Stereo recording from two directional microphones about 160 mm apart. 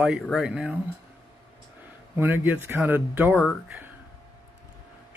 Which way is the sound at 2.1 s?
15° right (ahead or behind).